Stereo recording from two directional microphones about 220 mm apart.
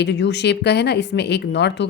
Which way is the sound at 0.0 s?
50° left (ahead or behind).